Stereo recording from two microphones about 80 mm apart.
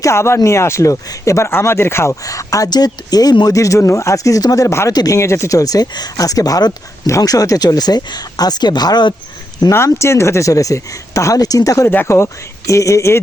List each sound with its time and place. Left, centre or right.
0.0 s speech: left
2.2 s speech: left
2.6 s speech: left
3.5 s speech: left
9.7 s speech: left
11.9 s speech: left